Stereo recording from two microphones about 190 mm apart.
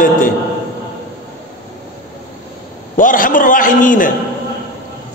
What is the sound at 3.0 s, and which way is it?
A man's voice, 45° left (ahead or behind).